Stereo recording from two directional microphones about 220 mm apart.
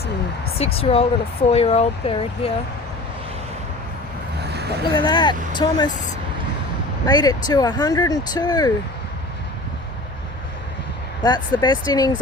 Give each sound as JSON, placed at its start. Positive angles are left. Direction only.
{"t": 0.6, "sound": "speech", "side_deg": 25}
{"t": 4.4, "sound": "vehicle", "side_deg": -45}
{"t": 4.9, "sound": "speech", "side_deg": 20}
{"t": 7.1, "sound": "speech", "side_deg": 20}
{"t": 11.2, "sound": "speech", "side_deg": 20}